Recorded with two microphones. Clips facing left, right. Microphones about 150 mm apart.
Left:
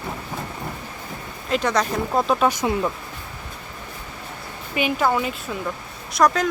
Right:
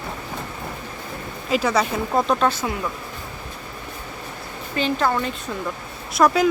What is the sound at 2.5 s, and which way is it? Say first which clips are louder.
Speech: left 3 dB; 20° left (ahead or behind).